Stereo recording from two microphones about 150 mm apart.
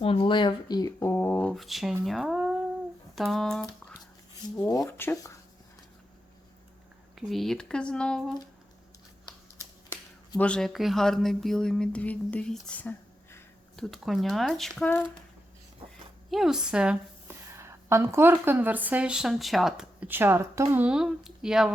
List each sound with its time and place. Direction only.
0.0 s speech: 35° left (ahead or behind); by 3.7 s centre (ahead or behind)
4.9 s speech: 15° left (ahead or behind)
7.2 s speech: centre (ahead or behind)
9.9 s speech: 10° left (ahead or behind)
13.8 s speech: centre (ahead or behind)
16.3 s speech: 5° right (ahead or behind)
17.5 s a woman's voice: 20° right (ahead or behind)